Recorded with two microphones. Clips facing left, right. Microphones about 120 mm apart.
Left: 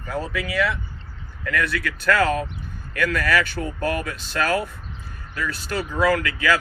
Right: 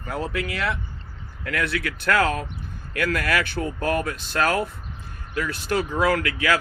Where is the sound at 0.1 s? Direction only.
55° right (ahead or behind).